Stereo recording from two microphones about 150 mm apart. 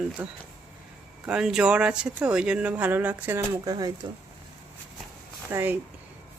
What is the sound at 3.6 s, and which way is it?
Speech, 25° right (ahead or behind).